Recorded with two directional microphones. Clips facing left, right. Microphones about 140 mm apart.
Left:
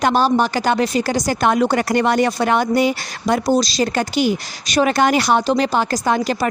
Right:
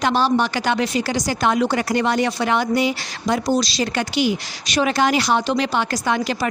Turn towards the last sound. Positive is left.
turn(degrees=40)  # may be behind; listen again after turning